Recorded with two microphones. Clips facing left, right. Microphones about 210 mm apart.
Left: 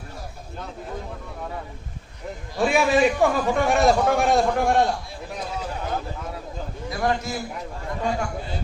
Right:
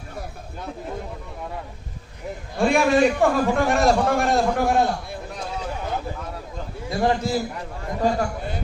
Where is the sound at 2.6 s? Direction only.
Centre (ahead or behind).